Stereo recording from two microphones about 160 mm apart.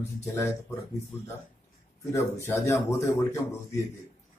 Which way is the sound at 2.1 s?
20° left (ahead or behind).